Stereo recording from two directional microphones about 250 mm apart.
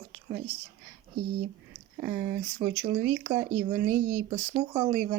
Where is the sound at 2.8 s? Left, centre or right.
Right.